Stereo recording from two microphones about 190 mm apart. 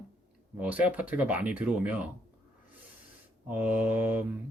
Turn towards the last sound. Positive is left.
turn(degrees=-10)  # may be behind; listen again after turning